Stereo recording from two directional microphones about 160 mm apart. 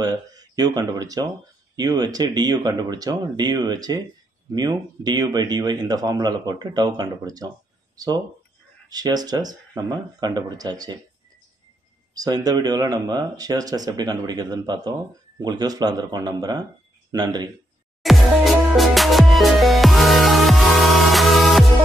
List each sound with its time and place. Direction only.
0.0 s speech: 25° right (ahead or behind)
12.1 s speech: 25° right (ahead or behind)
18.0 s music: centre (ahead or behind)